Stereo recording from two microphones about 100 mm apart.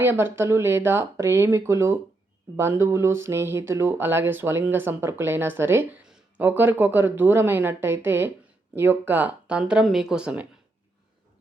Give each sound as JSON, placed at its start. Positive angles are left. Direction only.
{"t": 0.0, "sound": "speech", "side_deg": -20}
{"t": 6.0, "sound": "speech", "side_deg": -10}